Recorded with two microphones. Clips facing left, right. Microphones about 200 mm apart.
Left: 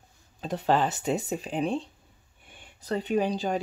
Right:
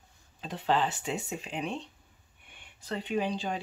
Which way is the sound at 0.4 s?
45° left (ahead or behind).